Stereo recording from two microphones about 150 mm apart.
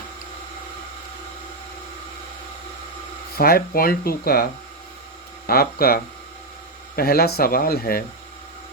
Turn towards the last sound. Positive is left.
turn(degrees=90)